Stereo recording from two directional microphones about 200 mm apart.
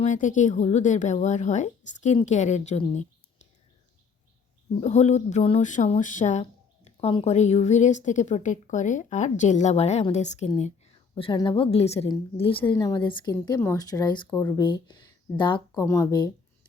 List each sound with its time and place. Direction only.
0.0 s speech: 40° left (ahead or behind)
4.8 s speech: 35° left (ahead or behind); by 16.3 s 20° left (ahead or behind)